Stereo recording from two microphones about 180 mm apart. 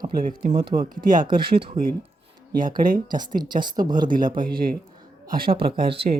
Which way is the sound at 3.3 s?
25° right (ahead or behind).